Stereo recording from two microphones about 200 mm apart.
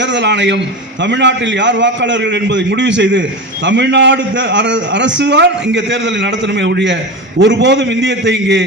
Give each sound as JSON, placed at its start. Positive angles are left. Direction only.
{"t": 0.0, "sound": "a man's voice", "side_deg": -60}